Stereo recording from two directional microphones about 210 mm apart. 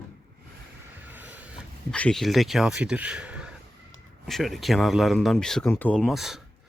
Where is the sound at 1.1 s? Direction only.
10° right (ahead or behind).